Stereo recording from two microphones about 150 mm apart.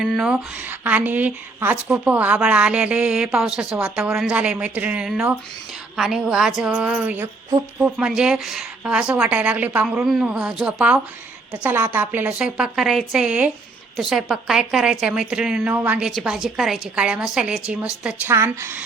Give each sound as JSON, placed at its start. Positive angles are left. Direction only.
{"t": 0.0, "sound": "a woman's voice", "side_deg": -5}
{"t": 18.3, "sound": "speech", "side_deg": -15}